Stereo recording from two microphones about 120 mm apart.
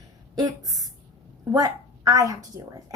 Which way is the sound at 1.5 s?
30° right (ahead or behind).